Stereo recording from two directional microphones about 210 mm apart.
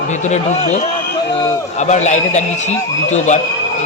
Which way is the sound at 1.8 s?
35° left (ahead or behind).